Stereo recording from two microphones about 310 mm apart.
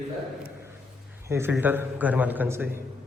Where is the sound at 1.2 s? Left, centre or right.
Centre.